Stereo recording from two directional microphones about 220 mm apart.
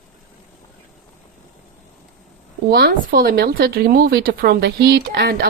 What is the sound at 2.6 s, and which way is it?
Speech, 45° right (ahead or behind).